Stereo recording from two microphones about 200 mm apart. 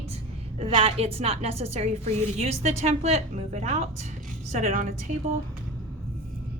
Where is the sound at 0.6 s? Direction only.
30° right (ahead or behind).